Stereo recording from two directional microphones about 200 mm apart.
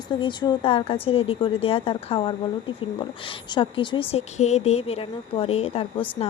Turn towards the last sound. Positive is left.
turn(degrees=30)  # may be behind; listen again after turning